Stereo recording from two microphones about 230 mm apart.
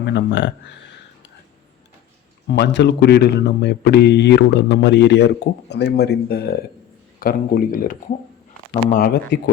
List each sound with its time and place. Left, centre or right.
0.0 s speech: left
2.5 s speech: left